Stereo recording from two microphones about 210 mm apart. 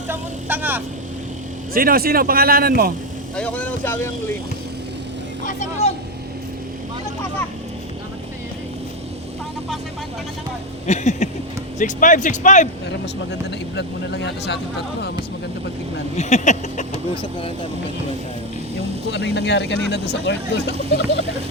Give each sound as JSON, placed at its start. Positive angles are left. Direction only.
{"t": 0.1, "sound": "vehicle", "side_deg": -10}
{"t": 1.7, "sound": "speech", "side_deg": -45}
{"t": 3.3, "sound": "speech", "side_deg": 5}
{"t": 5.5, "sound": "speech", "side_deg": 35}
{"t": 10.8, "sound": "speech", "side_deg": 35}
{"t": 13.7, "sound": "speech", "side_deg": 55}
{"t": 16.1, "sound": "speech", "side_deg": 35}
{"t": 19.1, "sound": "speech", "side_deg": 55}